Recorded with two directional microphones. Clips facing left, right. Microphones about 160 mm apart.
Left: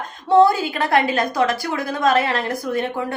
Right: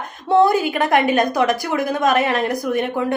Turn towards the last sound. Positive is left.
turn(degrees=-20)  # may be behind; listen again after turning